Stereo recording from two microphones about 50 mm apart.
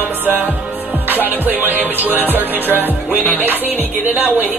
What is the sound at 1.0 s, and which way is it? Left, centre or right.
Music, right.